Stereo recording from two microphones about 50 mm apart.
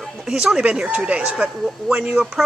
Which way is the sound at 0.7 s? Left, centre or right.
Right.